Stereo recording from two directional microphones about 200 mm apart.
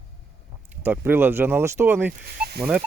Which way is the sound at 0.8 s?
10° right (ahead or behind).